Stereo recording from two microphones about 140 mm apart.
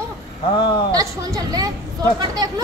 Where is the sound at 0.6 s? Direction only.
35° left (ahead or behind).